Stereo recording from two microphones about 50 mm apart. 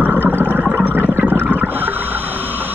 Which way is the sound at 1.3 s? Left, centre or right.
Right.